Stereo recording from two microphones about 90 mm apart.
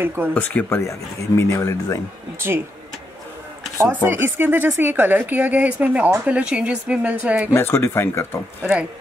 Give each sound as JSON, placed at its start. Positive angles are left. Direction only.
{"t": 0.0, "sound": "speech", "side_deg": -25}
{"t": 0.3, "sound": "speech", "side_deg": 20}
{"t": 3.9, "sound": "speech", "side_deg": -25}
{"t": 7.5, "sound": "speech", "side_deg": 30}